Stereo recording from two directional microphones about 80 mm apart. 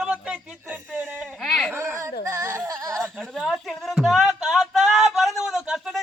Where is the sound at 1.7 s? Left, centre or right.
Right.